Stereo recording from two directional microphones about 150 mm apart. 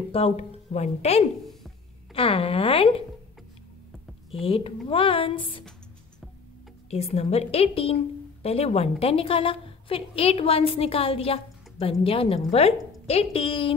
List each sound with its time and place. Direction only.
0.1 s a woman's voice: 40° left (ahead or behind)
4.3 s a woman's voice: 35° left (ahead or behind)
6.9 s a woman's voice: 45° left (ahead or behind)